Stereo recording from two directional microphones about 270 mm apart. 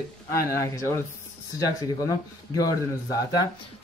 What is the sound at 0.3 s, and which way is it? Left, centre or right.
Speech, centre.